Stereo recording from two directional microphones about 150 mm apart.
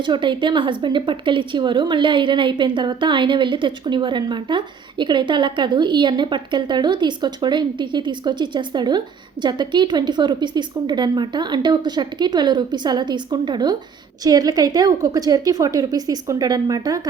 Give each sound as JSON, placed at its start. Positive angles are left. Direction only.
{"t": 0.0, "sound": "a woman's voice", "side_deg": -30}